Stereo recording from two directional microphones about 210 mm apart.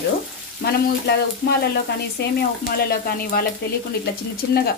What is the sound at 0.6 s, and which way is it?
Speech, 50° left (ahead or behind).